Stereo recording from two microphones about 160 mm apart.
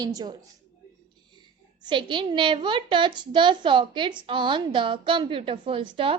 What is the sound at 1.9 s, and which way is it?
A woman's voice, 30° right (ahead or behind).